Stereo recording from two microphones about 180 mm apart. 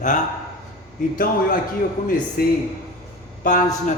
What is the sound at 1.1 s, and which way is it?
A man's voice, 50° left (ahead or behind).